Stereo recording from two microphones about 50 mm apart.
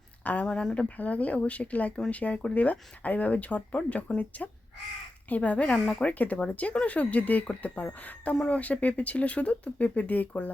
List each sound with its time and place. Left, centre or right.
0.4 s speech: centre
0.7 s speech: left